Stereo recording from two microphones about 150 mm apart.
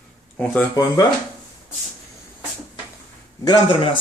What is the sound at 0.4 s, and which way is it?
Speech, 5° left (ahead or behind).